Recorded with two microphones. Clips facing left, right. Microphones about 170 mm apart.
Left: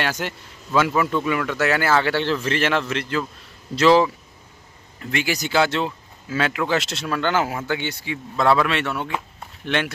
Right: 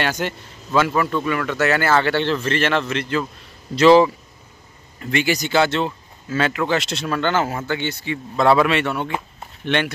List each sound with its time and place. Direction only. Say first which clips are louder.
0.0 s speech: right 3 dB; 5° left (ahead or behind)
5.1 s speech: right 3 dB; 5° left (ahead or behind)